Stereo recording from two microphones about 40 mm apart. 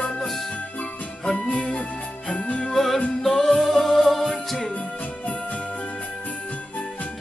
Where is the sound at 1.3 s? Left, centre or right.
Left.